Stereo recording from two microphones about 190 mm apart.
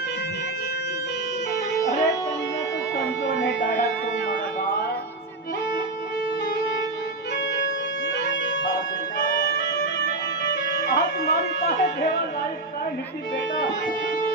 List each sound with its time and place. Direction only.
1.7 s music: 15° left (ahead or behind)
3.2 s music: 75° left (ahead or behind)
10.9 s a sound: 60° left (ahead or behind)